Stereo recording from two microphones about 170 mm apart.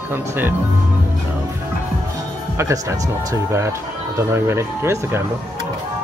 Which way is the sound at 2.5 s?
15° right (ahead or behind).